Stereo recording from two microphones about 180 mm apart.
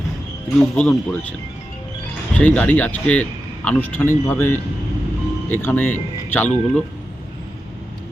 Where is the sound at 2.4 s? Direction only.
10° left (ahead or behind).